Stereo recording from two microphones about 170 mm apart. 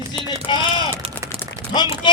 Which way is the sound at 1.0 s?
35° right (ahead or behind).